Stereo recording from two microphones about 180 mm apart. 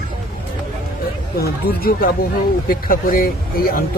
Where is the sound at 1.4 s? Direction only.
55° left (ahead or behind).